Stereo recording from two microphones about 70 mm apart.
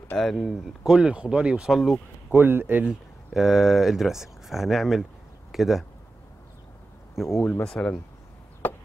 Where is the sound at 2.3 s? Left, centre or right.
Right.